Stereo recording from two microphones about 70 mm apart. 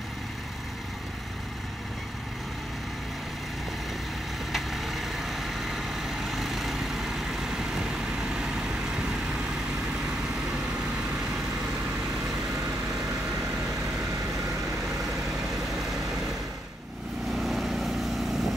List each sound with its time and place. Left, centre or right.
4.5 s vehicle: centre
17.4 s vehicle: centre